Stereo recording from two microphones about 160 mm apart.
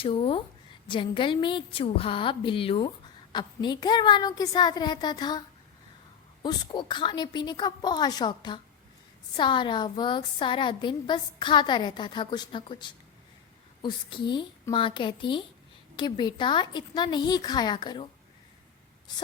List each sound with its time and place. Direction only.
0.0 s a woman's voice: 35° left (ahead or behind)
6.4 s a woman's voice: 30° left (ahead or behind)